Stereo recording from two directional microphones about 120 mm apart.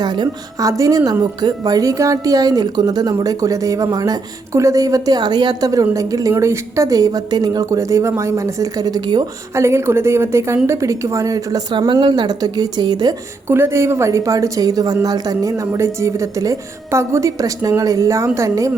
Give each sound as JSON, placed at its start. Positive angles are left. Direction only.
{"t": 0.0, "sound": "a woman's voice", "side_deg": -35}
{"t": 9.6, "sound": "speech", "side_deg": -20}
{"t": 11.7, "sound": "a woman's voice", "side_deg": -40}
{"t": 13.5, "sound": "speech", "side_deg": -20}